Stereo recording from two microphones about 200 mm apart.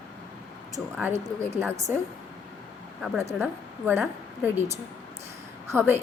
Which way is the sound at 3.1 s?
10° right (ahead or behind).